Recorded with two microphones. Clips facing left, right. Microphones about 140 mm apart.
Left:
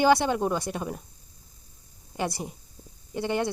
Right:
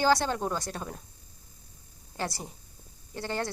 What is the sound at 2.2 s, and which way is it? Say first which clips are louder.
Speech: left 4 dB; 15° left (ahead or behind).